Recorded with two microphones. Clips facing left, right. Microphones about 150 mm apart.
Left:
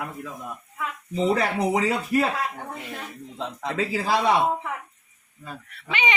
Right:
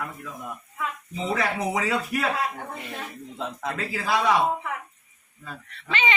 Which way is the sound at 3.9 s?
30° left (ahead or behind).